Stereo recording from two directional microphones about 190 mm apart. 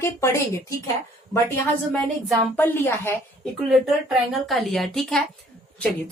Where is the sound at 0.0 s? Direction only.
15° left (ahead or behind).